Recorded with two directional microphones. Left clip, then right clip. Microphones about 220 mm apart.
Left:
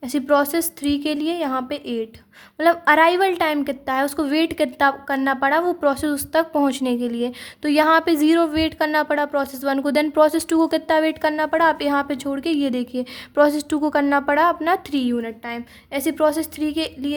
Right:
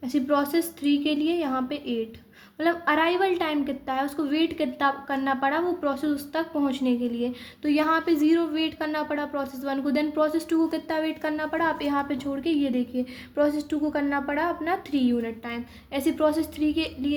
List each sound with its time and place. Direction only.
0.1 s a woman's voice: 40° left (ahead or behind)